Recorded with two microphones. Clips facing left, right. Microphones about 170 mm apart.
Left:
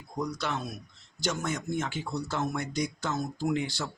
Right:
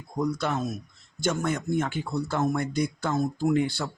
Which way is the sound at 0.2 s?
50° right (ahead or behind).